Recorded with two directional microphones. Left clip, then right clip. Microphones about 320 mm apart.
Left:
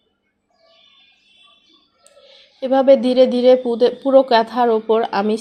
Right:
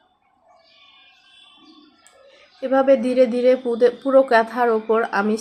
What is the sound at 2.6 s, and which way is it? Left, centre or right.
A woman's voice, centre.